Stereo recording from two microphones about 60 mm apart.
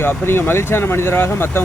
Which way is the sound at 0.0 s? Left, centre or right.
Left.